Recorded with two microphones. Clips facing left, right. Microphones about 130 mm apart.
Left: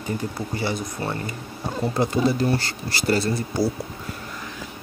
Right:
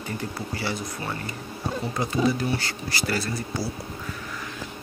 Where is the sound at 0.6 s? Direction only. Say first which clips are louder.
Left 4 dB; 20° left (ahead or behind).